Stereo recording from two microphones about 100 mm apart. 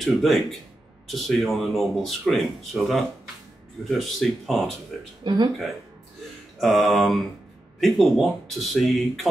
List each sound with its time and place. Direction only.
0.0 s speech: centre (ahead or behind)
5.2 s speech: 50° right (ahead or behind)
6.6 s speech: centre (ahead or behind)